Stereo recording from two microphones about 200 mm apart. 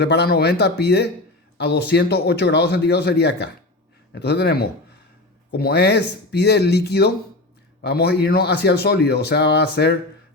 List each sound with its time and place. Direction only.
0.0 s a man's voice: 55° left (ahead or behind)